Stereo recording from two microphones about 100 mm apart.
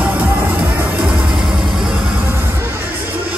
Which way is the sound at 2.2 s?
20° right (ahead or behind).